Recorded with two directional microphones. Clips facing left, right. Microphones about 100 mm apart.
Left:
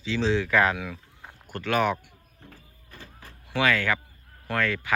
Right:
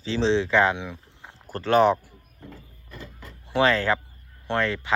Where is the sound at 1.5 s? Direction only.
35° right (ahead or behind).